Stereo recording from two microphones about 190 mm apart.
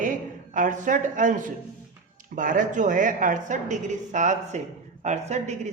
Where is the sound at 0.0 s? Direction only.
45° right (ahead or behind).